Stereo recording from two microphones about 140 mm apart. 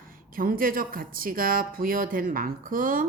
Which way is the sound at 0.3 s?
90° right.